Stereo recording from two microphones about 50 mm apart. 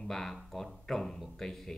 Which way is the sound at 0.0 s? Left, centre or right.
Centre.